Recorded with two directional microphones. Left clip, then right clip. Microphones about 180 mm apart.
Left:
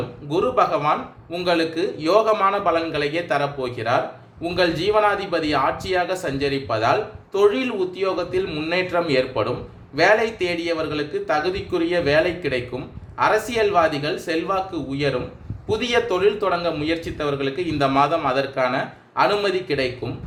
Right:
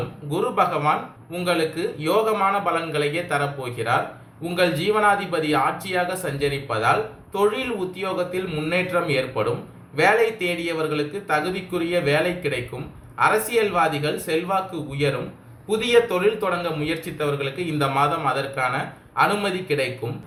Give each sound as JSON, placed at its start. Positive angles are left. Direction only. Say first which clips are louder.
{"t": 0.3, "sound": "speech", "louder": "left 3 dB", "side_deg": 45}